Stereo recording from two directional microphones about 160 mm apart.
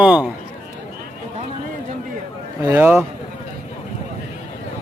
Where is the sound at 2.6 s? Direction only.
15° right (ahead or behind).